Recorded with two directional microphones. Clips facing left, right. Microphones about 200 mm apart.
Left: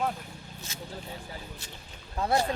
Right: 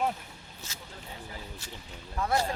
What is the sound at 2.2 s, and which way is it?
Speech, 25° left (ahead or behind).